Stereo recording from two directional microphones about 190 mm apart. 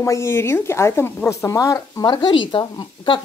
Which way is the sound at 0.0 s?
15° left (ahead or behind).